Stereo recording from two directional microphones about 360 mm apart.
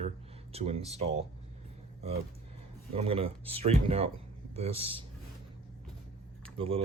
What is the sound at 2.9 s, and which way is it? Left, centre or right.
Speech, centre.